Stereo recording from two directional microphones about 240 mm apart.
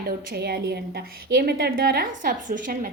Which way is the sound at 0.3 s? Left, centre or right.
Right.